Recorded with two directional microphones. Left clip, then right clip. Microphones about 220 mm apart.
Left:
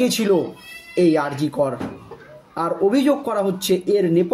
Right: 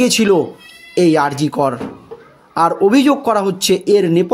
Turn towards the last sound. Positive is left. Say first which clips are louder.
# right 5 dB
turn(degrees=-45)  # may be behind; listen again after turning